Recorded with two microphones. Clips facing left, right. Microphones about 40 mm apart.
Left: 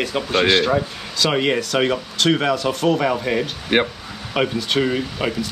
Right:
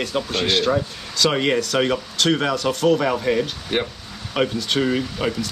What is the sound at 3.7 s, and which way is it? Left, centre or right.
Speech, left.